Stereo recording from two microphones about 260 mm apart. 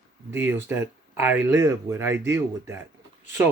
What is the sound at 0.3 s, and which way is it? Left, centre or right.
Speech, centre.